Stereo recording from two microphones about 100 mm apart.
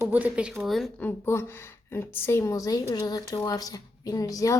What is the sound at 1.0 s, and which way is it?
A woman's voice, 20° left (ahead or behind).